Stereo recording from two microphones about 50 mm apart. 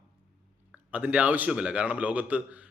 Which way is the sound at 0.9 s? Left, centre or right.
Right.